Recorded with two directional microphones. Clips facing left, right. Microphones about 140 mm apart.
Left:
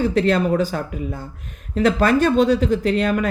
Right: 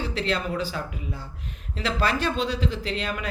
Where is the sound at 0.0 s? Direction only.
45° left (ahead or behind).